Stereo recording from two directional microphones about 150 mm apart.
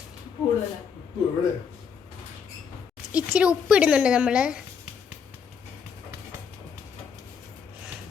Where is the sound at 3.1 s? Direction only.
5° right (ahead or behind).